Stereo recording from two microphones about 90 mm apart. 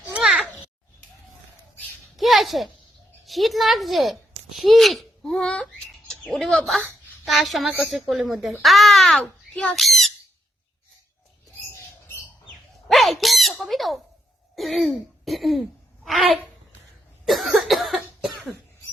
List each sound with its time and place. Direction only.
0.1 s a sound: 5° right (ahead or behind)
2.1 s a sound: centre (ahead or behind)
3.2 s a woman's voice: centre (ahead or behind)
9.2 s speech: 20° left (ahead or behind)
9.7 s speech: centre (ahead or behind)
12.9 s bird: centre (ahead or behind)
14.5 s throat clearing: centre (ahead or behind)
16.0 s a woman's voice: centre (ahead or behind)
17.2 s cough: centre (ahead or behind)